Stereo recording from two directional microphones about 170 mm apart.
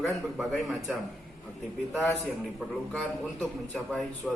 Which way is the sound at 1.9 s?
10° left (ahead or behind).